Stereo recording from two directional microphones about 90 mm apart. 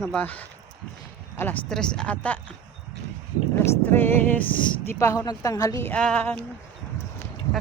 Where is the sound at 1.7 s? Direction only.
5° left (ahead or behind).